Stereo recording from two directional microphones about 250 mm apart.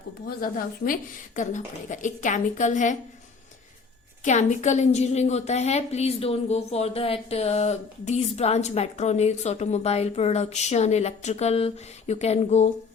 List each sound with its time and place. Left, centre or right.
0.3 s a woman's voice: left
4.2 s a woman's voice: left